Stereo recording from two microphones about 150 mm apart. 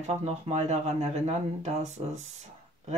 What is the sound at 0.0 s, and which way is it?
Speech, 45° right (ahead or behind).